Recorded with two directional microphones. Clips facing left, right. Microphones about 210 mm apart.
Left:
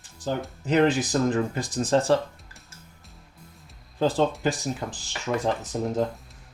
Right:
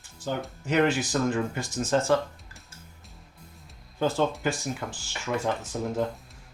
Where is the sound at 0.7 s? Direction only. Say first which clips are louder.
Left 3 dB; 35° left (ahead or behind).